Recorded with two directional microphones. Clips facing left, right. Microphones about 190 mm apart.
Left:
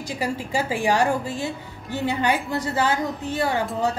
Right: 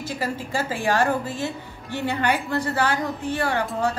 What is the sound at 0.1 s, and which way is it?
Speech, 15° left (ahead or behind).